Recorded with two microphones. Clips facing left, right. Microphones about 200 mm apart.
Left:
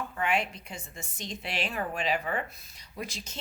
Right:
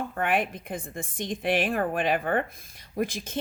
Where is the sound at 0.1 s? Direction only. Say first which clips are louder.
Right 2 dB; 55° right (ahead or behind).